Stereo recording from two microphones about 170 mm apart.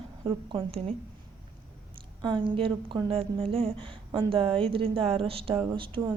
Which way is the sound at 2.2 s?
30° right (ahead or behind).